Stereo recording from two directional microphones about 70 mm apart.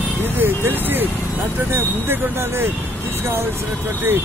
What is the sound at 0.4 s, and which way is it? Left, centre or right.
Speech, right.